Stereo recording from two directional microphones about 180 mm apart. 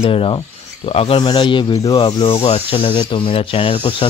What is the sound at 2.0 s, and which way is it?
Speech, 30° left (ahead or behind).